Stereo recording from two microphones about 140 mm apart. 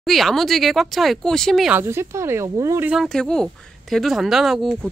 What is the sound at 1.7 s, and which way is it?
Speech, 20° right (ahead or behind).